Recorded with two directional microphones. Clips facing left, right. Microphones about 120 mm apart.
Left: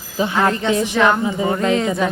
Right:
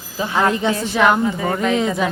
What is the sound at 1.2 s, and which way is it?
Speech, 20° left (ahead or behind).